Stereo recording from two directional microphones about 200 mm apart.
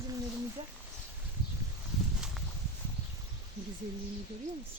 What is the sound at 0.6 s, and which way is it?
Speech, 25° right (ahead or behind).